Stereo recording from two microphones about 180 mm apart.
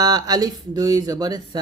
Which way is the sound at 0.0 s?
20° right (ahead or behind).